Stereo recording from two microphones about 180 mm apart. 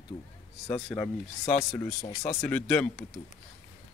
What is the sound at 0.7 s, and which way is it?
Speech, 5° left (ahead or behind).